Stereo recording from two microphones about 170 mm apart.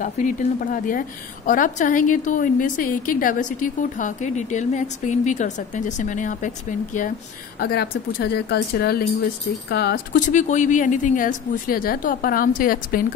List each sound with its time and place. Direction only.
0.0 s a woman's voice: 50° left (ahead or behind)
7.6 s speech: 70° left (ahead or behind)
10.1 s a woman's voice: 50° left (ahead or behind)